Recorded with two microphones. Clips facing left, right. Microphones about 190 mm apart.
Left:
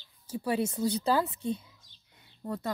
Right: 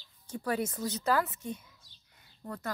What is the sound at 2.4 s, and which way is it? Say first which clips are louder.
Speech: left 4 dB; 20° left (ahead or behind).